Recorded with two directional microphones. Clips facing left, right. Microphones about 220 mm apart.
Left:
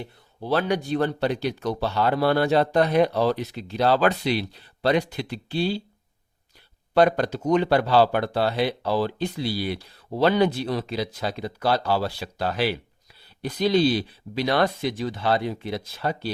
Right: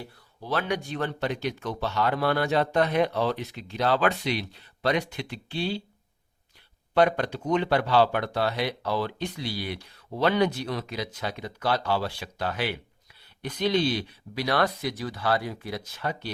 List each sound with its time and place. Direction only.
0.0 s speech: 30° left (ahead or behind)
6.9 s speech: 35° left (ahead or behind)